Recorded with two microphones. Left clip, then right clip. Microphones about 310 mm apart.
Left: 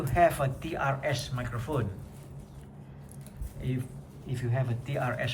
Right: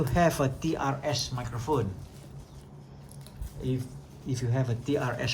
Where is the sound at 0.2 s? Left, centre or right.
Centre.